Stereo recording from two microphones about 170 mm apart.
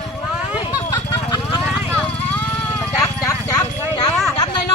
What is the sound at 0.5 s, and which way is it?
Vehicle, 25° left (ahead or behind).